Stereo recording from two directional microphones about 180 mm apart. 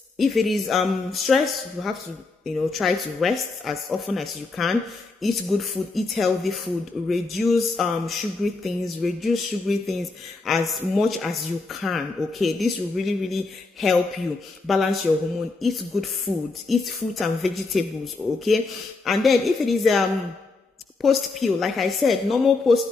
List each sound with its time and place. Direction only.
0.2 s speech: centre (ahead or behind)